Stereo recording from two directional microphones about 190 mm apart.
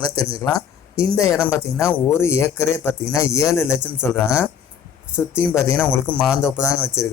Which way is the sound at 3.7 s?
5° right (ahead or behind).